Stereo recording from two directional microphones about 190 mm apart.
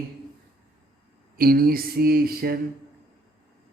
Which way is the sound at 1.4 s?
50° right (ahead or behind).